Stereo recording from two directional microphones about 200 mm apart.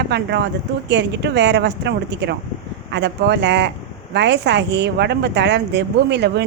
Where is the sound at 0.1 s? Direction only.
60° right (ahead or behind).